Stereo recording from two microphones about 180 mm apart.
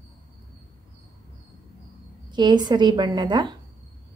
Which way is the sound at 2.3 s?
25° right (ahead or behind).